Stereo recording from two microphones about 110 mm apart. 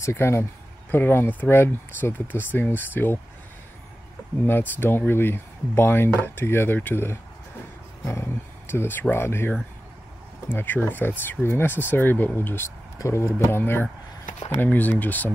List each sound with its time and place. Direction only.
0.0 s speech: 25° left (ahead or behind)
4.5 s speech: 20° left (ahead or behind)